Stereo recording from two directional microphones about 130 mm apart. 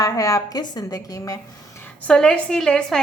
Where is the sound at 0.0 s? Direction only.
25° left (ahead or behind).